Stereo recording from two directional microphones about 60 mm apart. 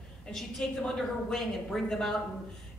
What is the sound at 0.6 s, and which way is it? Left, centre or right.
Speech, centre.